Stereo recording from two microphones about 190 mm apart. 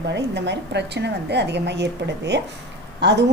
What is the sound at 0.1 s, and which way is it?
A woman's voice, 65° right (ahead or behind).